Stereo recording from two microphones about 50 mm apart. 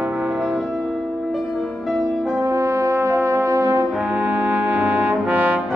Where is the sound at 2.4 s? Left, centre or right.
Right.